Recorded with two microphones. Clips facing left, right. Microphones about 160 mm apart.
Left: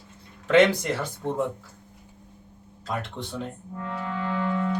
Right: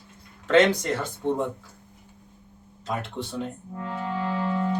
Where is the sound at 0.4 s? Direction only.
10° left (ahead or behind).